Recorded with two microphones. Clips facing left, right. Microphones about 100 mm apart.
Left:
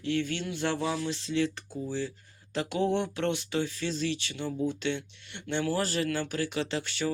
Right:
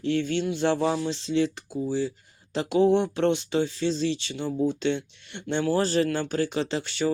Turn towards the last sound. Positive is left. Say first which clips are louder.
# right 4 dB
turn(degrees=-25)  # may be behind; listen again after turning